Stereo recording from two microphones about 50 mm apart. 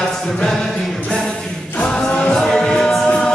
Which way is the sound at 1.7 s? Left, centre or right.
Left.